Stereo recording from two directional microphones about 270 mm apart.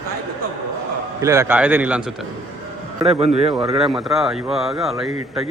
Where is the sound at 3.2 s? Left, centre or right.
Right.